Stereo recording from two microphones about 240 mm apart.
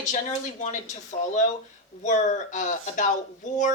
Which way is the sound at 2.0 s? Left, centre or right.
Left.